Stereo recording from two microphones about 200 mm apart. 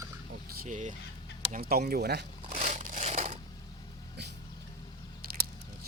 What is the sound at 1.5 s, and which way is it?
Speech, 50° right (ahead or behind).